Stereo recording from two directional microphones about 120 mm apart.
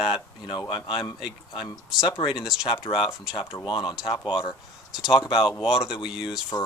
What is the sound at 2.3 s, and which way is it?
Speech, 5° right (ahead or behind).